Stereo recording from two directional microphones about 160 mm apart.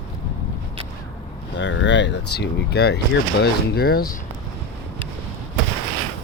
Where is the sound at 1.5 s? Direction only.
90° left.